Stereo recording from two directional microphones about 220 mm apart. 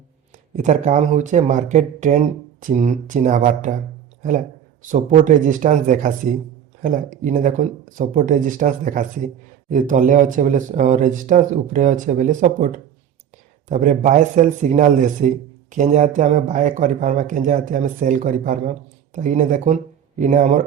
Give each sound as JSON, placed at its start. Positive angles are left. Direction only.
{"t": 0.5, "sound": "speech", "side_deg": -35}